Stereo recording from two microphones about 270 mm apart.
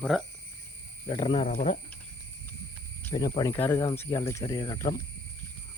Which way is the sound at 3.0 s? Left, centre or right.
Centre.